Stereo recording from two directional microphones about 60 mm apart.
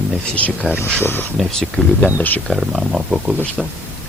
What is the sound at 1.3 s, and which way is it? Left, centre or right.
Speech, centre.